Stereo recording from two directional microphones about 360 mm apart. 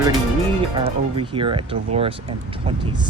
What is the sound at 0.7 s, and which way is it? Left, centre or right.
Speech, centre.